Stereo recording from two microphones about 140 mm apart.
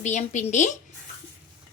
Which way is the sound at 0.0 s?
60° left (ahead or behind).